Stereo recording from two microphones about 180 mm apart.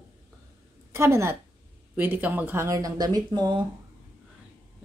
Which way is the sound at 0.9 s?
15° right (ahead or behind).